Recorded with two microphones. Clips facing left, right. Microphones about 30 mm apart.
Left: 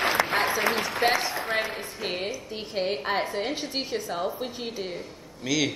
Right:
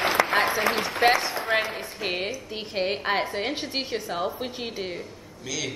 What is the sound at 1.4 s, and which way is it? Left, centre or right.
Speech, right.